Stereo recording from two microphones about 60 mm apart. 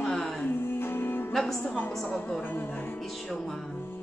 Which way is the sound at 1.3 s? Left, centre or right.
Centre.